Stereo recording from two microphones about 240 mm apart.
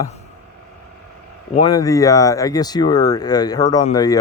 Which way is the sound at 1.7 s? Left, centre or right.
Centre.